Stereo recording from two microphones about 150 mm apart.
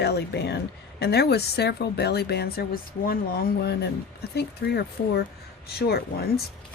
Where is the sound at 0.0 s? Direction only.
90° left.